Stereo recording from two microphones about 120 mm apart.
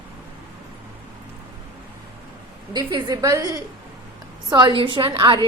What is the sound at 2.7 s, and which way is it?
Speech, 35° right (ahead or behind).